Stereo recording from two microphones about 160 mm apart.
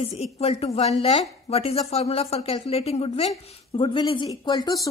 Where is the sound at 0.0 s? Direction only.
40° left (ahead or behind).